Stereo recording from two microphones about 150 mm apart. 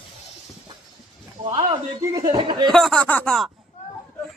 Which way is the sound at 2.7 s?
5° left (ahead or behind).